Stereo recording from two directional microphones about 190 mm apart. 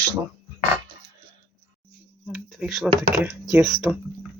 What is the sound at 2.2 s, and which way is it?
Speech, centre (ahead or behind).